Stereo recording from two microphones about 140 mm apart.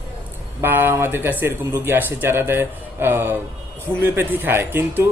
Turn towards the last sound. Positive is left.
turn(degrees=-15)  # may be behind; listen again after turning